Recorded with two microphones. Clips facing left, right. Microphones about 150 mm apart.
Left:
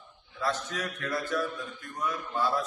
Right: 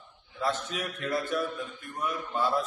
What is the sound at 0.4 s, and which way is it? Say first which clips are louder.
A man's voice: right 1 dB; 20° right (ahead or behind).